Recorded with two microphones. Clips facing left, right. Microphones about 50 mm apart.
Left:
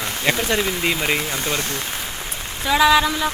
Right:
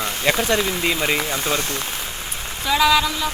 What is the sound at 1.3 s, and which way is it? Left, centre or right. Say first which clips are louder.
Speech: right 1 dB; centre.